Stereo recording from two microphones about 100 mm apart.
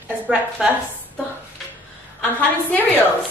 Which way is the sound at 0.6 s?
5° right (ahead or behind).